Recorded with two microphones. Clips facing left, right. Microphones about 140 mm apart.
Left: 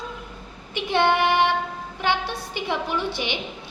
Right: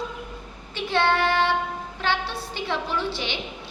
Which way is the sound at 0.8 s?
15° left (ahead or behind).